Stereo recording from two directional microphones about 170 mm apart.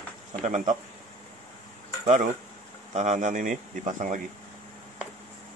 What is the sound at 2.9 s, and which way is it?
Speech, 40° right (ahead or behind).